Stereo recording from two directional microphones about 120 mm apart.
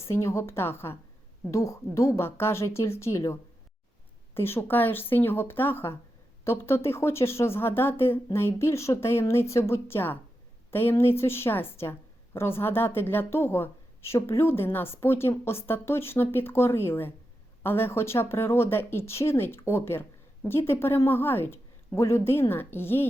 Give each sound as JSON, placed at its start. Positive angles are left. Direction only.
{"t": 0.0, "sound": "a woman's voice", "side_deg": 25}
{"t": 4.4, "sound": "a woman's voice", "side_deg": 20}